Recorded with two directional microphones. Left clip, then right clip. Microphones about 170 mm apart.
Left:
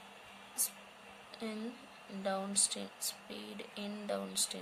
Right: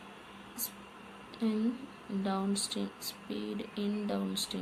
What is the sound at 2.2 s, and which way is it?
Speech, 50° left (ahead or behind).